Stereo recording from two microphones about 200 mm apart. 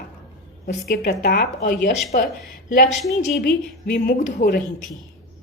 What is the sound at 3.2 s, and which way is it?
A woman's voice, 50° left (ahead or behind).